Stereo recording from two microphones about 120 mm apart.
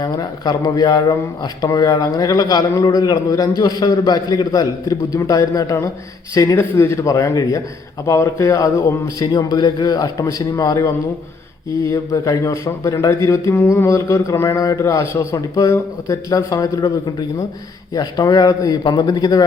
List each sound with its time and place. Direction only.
0.0 s a man's voice: 35° left (ahead or behind)
11.9 s a man's voice: 25° left (ahead or behind)